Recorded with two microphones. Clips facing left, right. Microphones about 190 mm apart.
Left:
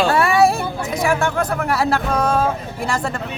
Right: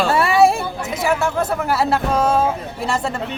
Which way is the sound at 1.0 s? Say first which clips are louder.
Even; 5° right (ahead or behind).